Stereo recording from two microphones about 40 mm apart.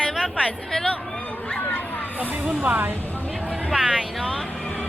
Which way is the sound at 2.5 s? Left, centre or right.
Right.